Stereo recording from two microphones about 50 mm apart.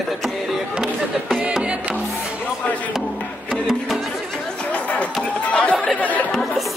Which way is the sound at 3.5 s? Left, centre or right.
Centre.